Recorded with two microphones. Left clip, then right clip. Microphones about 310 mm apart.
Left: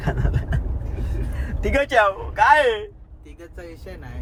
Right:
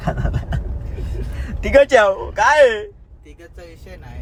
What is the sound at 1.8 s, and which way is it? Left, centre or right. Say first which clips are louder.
A man's voice: right 5 dB; right.